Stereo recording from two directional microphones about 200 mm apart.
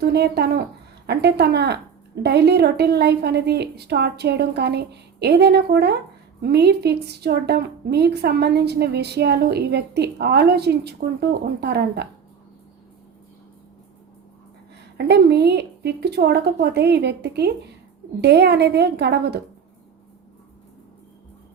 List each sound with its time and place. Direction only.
0.0 s a woman's voice: 55° right (ahead or behind)
14.9 s a woman's voice: 55° right (ahead or behind)